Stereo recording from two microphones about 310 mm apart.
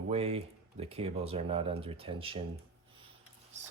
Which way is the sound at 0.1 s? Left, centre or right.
Centre.